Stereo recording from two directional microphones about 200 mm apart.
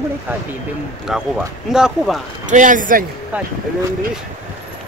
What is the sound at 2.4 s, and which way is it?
Speech, 40° right (ahead or behind).